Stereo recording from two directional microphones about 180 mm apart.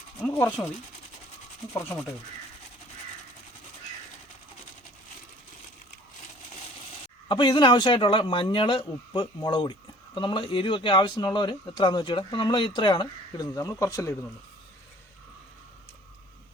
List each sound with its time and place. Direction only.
0.3 s a sound: 10° left (ahead or behind)
1.7 s sanding: 15° left (ahead or behind)
7.3 s speech: 25° left (ahead or behind)